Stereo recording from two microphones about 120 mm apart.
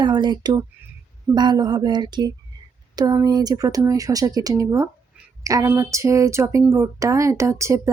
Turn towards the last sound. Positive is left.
turn(degrees=-25)  # may be behind; listen again after turning